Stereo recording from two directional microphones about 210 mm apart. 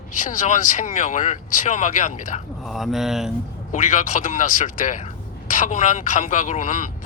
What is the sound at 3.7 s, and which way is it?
Speech, 35° left (ahead or behind).